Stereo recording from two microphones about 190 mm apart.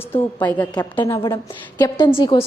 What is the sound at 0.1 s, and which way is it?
A woman's voice, 10° left (ahead or behind).